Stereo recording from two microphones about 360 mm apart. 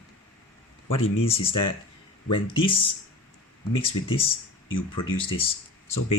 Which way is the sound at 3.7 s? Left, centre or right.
Centre.